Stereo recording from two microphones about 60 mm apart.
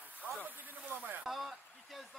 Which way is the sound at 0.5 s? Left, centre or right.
Right.